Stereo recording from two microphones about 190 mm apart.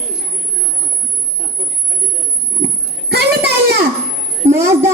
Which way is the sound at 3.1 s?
60° right (ahead or behind).